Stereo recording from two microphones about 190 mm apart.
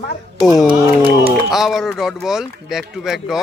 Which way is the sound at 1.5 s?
Centre (ahead or behind).